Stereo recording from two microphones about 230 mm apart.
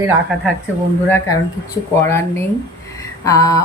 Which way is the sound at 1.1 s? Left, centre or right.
Centre.